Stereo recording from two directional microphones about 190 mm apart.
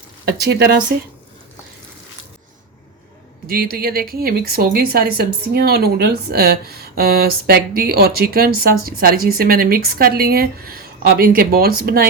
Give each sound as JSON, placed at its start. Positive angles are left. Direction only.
{"t": 0.3, "sound": "speech", "side_deg": -55}
{"t": 3.4, "sound": "speech", "side_deg": -50}